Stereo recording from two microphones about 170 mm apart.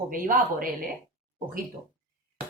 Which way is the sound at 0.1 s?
55° right (ahead or behind).